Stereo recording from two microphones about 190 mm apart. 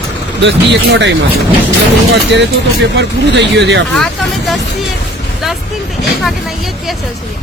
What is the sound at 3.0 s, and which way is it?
Speech, 65° right (ahead or behind).